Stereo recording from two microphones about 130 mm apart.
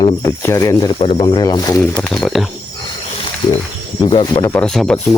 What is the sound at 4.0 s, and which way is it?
Speech, 35° left (ahead or behind).